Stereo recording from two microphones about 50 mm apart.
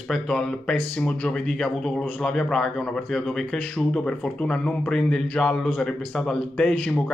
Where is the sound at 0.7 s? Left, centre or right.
Left.